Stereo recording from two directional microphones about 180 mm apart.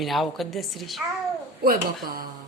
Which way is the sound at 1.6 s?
55° right (ahead or behind).